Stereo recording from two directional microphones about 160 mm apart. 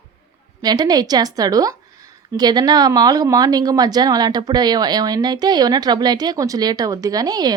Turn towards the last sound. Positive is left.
turn(degrees=-25)  # may be behind; listen again after turning